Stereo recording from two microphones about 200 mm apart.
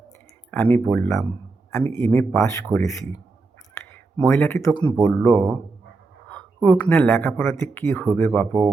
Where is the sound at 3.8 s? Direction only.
10° left (ahead or behind).